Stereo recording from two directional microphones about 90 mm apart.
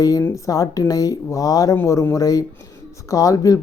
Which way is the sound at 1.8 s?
30° left (ahead or behind).